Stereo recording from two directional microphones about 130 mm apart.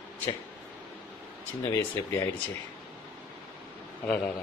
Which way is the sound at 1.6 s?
15° left (ahead or behind).